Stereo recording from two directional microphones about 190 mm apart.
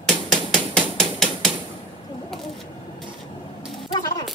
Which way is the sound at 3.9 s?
25° left (ahead or behind).